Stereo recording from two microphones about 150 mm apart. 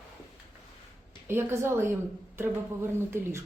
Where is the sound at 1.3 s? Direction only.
15° right (ahead or behind).